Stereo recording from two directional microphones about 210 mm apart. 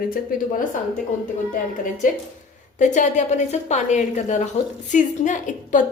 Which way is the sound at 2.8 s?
35° left (ahead or behind).